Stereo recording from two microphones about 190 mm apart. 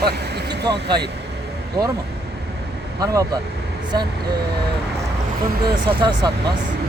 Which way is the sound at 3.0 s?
15° right (ahead or behind).